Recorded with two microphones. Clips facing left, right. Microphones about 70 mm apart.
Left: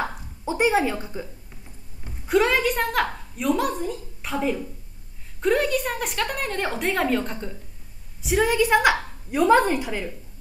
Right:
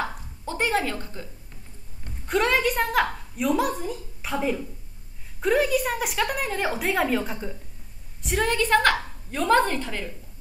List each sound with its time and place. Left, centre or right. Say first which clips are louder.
0.0 s speech: left 2 dB; centre
2.0 s a woman's voice: left 3 dB; centre